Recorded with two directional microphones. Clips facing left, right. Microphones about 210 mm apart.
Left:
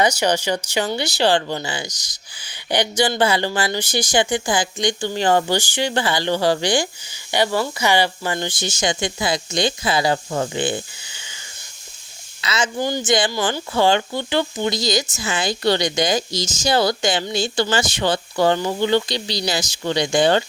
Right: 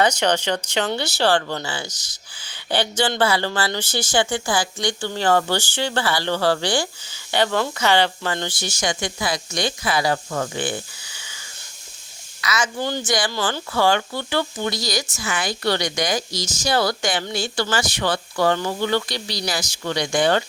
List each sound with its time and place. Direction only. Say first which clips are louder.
0.0 s speech: left 1 dB; 10° left (ahead or behind)
12.4 s speech: left 1 dB; 25° left (ahead or behind)
12.8 s speech: left 6 dB; 10° left (ahead or behind)